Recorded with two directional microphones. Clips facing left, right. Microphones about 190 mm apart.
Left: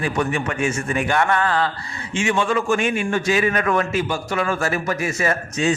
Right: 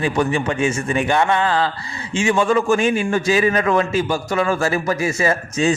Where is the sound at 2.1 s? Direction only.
35° right (ahead or behind).